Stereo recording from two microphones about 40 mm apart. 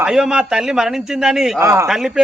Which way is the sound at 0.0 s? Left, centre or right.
Centre.